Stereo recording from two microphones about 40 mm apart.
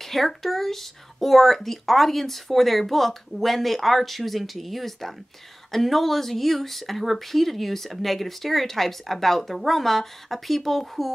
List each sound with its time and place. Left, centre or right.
0.0 s speech: centre